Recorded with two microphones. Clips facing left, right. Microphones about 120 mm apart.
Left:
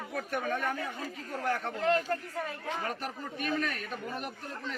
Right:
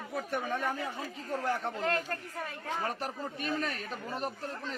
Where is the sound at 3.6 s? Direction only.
30° right (ahead or behind).